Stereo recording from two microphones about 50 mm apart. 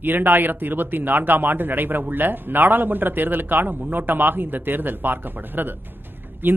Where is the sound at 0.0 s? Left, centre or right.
Right.